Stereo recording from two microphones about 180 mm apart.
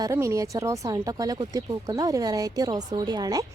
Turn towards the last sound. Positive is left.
turn(degrees=-20)  # may be behind; listen again after turning